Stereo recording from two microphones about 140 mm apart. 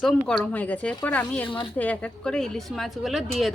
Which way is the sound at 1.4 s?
35° left (ahead or behind).